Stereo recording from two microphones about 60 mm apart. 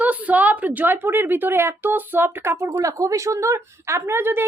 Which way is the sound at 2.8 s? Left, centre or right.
Right.